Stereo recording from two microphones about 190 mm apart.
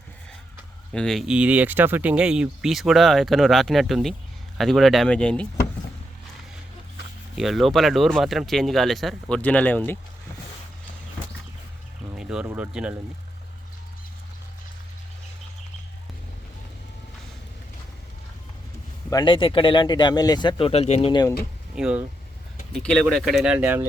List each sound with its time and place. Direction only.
0.9 s speech: centre (ahead or behind)
7.3 s speech: centre (ahead or behind)
12.1 s a sound: 5° right (ahead or behind)
12.5 s speech: 5° right (ahead or behind)
19.1 s speech: 25° left (ahead or behind)
21.8 s speech: 5° right (ahead or behind)